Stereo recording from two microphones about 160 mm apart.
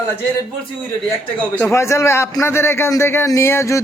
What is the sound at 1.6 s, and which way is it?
A man's voice, 15° left (ahead or behind).